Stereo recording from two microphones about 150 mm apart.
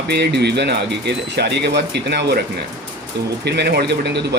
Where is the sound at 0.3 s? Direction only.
90° right.